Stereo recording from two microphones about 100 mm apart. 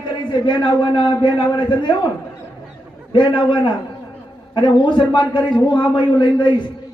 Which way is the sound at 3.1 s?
55° left (ahead or behind).